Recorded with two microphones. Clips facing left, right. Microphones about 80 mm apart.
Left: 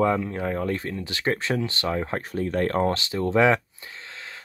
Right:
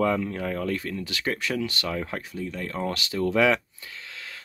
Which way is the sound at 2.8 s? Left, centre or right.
Left.